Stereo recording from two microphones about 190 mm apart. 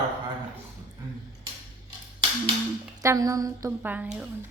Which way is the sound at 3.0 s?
15° right (ahead or behind).